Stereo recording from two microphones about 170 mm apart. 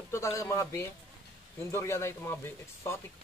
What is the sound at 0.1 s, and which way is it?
Speech, 15° left (ahead or behind).